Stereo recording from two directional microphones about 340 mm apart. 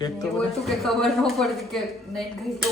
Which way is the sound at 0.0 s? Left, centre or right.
Centre.